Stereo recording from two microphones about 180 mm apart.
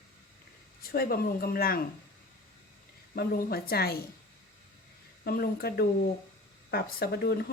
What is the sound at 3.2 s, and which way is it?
Speech, 60° left (ahead or behind).